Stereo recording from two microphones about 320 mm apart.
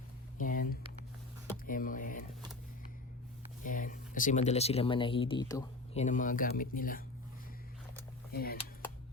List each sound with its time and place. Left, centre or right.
0.3 s a sound: left
3.6 s speech: left
6.0 s speech: left
8.3 s speech: left